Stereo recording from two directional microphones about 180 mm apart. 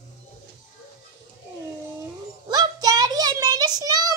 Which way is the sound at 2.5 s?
20° right (ahead or behind).